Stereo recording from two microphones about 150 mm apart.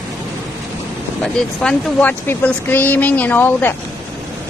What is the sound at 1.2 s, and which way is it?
Speech, 5° left (ahead or behind).